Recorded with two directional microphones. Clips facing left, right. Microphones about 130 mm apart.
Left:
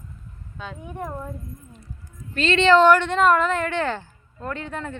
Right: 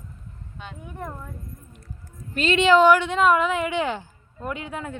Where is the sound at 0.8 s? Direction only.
20° left (ahead or behind).